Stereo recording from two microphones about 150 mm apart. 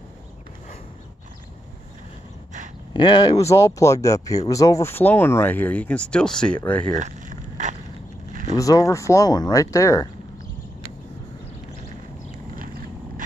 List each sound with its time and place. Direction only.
2.9 s speech: 30° left (ahead or behind); by 6.9 s 10° left (ahead or behind)
7.0 s a sound: 55° right (ahead or behind)
8.5 s speech: 20° left (ahead or behind)